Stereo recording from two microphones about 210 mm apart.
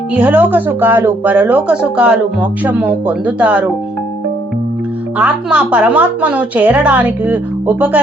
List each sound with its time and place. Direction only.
0.1 s speech: 10° right (ahead or behind)
5.1 s speech: 5° right (ahead or behind)